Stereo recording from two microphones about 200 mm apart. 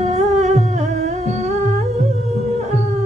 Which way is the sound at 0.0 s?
35° right (ahead or behind).